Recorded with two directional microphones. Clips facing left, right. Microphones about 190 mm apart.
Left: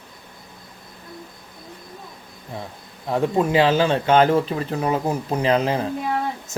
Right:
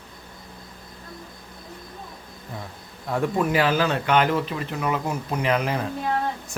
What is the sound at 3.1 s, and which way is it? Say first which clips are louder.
Speech: left 3 dB; 25° left (ahead or behind).